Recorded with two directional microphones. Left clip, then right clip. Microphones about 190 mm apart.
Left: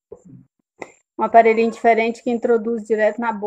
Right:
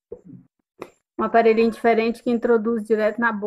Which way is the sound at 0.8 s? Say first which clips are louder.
Left 3 dB; 15° right (ahead or behind).